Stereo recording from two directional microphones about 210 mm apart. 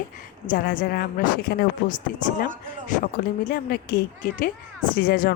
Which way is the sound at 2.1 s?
45° left (ahead or behind).